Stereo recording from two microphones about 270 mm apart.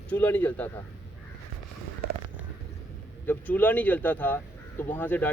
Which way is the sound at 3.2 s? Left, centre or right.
Centre.